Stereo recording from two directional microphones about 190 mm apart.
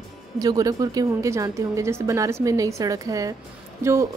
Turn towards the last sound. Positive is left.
turn(degrees=-15)  # may be behind; listen again after turning